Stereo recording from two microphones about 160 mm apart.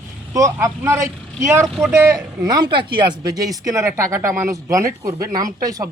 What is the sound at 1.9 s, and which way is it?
Speech, 20° right (ahead or behind).